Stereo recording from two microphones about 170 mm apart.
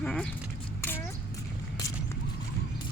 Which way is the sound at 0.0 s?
5° left (ahead or behind).